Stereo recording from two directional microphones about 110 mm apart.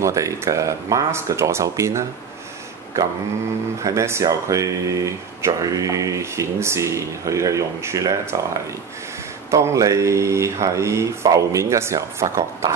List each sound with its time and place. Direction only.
0.0 s speech: 30° right (ahead or behind)
9.5 s speech: 30° right (ahead or behind)